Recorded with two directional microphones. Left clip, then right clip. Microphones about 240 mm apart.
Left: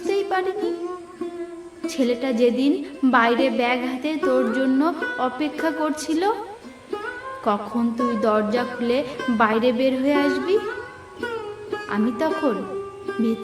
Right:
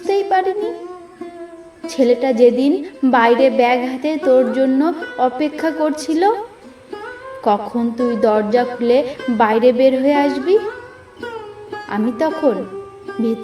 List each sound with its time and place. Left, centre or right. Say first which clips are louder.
0.0 s music: right 7 dB; centre
1.8 s a woman's voice: right 8 dB; centre
6.9 s music: even; centre
7.5 s a woman's voice: right 6 dB; centre
11.2 s sitar: even; centre
13.1 s music: right 4 dB; centre